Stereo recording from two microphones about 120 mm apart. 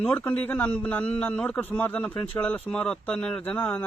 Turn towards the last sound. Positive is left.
turn(degrees=15)  # may be behind; listen again after turning